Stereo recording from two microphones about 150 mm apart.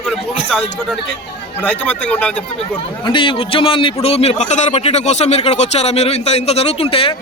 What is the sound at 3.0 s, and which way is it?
A man's voice, 35° left (ahead or behind).